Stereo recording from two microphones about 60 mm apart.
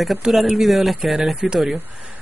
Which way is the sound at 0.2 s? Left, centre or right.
Centre.